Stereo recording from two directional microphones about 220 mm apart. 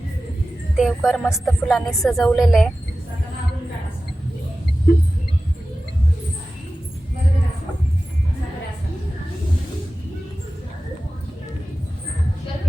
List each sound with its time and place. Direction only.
0.8 s a woman's voice: centre (ahead or behind)